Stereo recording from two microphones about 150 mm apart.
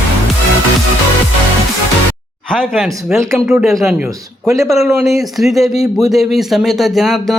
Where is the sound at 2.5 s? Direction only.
Centre (ahead or behind).